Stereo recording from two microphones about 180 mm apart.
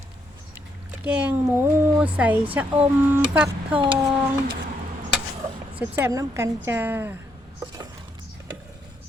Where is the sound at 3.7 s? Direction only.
30° right (ahead or behind).